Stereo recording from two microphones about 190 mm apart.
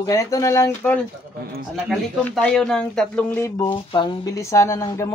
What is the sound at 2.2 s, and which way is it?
Speech, 5° left (ahead or behind).